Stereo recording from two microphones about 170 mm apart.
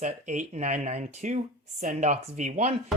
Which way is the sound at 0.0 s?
45° right (ahead or behind).